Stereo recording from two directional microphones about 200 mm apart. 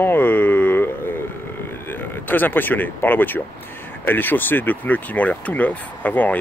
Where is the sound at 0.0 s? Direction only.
10° left (ahead or behind).